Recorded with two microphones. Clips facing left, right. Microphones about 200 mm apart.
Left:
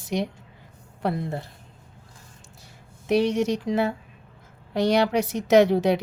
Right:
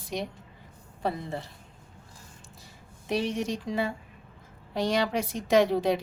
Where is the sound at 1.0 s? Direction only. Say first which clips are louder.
Left 4 dB; 60° left (ahead or behind).